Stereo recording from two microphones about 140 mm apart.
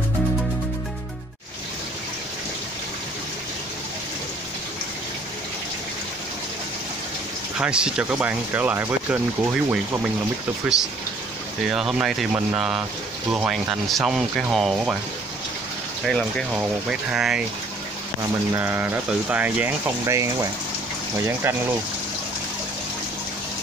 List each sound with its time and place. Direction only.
7.5 s speech: 5° right (ahead or behind)
16.1 s speech: 5° left (ahead or behind)
18.5 s speech: 15° right (ahead or behind)